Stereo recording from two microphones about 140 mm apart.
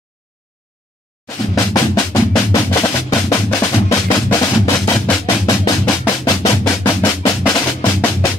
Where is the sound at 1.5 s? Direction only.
25° left (ahead or behind).